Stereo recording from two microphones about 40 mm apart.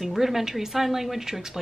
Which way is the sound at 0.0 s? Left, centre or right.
Centre.